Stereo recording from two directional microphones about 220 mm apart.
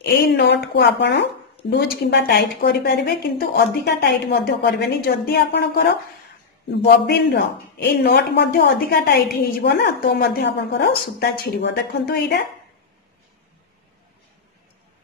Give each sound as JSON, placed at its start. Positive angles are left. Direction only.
{"t": 0.0, "sound": "speech", "side_deg": 50}
{"t": 7.1, "sound": "speech", "side_deg": 50}